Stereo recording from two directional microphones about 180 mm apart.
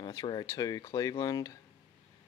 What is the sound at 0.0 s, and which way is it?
Speech, 25° left (ahead or behind).